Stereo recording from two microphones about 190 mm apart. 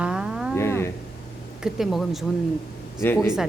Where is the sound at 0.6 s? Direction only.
15° left (ahead or behind).